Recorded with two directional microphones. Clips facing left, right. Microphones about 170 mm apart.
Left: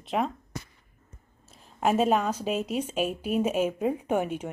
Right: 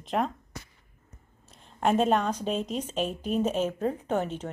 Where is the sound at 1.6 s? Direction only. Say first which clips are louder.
Even; 5° left (ahead or behind).